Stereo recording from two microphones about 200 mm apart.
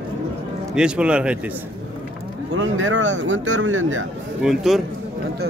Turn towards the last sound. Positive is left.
turn(degrees=0)  # may be behind; listen again after turning